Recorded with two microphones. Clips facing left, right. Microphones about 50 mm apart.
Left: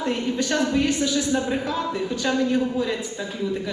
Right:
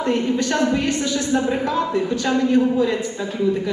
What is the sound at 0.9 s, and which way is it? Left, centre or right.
Speech, centre.